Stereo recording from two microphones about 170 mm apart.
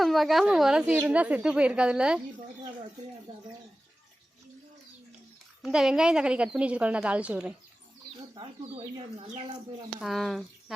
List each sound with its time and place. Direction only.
0.0 s a woman's voice: centre (ahead or behind)
5.6 s a woman's voice: 5° right (ahead or behind)
8.4 s speech: 35° right (ahead or behind)
10.0 s a woman's voice: centre (ahead or behind)